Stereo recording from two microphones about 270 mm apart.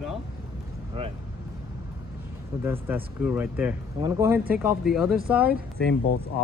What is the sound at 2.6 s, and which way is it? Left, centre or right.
Speech, centre.